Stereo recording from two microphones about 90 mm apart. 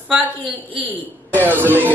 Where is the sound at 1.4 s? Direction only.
20° right (ahead or behind).